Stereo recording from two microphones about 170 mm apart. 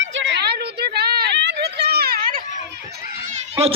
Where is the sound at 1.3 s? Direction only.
90° right; by 2.4 s 60° right (ahead or behind).